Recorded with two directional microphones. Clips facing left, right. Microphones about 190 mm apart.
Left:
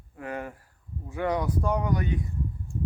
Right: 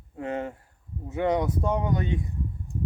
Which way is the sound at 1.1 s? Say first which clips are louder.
Right 3 dB; 20° right (ahead or behind).